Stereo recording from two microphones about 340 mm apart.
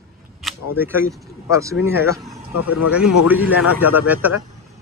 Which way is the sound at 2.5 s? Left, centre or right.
Left.